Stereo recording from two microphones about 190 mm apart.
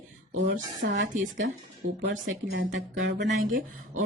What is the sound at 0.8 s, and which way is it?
Speech, 70° right (ahead or behind).